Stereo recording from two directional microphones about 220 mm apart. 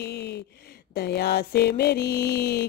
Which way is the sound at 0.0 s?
50° left (ahead or behind).